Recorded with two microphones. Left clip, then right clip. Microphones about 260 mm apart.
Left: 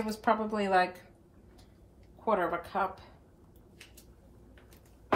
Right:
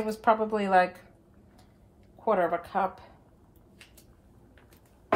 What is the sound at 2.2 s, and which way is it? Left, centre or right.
Speech, right.